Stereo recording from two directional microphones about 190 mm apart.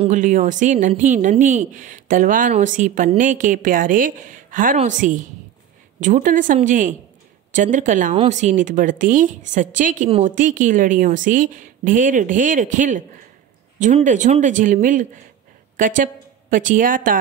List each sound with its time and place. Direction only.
0.0 s a woman's voice: 40° right (ahead or behind)